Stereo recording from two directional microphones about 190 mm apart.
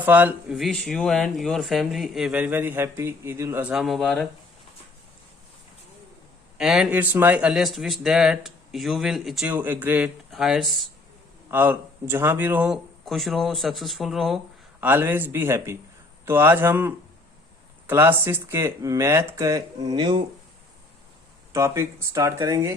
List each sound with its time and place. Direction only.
0.0 s speech: 10° right (ahead or behind)
6.6 s speech: 5° right (ahead or behind); by 20.2 s 25° right (ahead or behind)
21.5 s speech: 15° right (ahead or behind)